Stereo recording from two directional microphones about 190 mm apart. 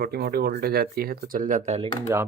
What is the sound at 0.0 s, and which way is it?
Speech, 55° right (ahead or behind).